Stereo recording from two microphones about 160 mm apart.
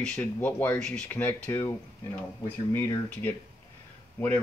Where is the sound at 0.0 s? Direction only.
10° left (ahead or behind).